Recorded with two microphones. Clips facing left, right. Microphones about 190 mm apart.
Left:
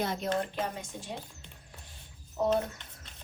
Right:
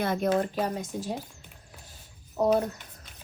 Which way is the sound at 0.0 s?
55° right (ahead or behind).